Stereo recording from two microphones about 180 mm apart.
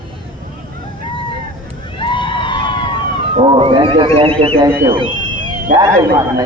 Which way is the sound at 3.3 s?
30° right (ahead or behind).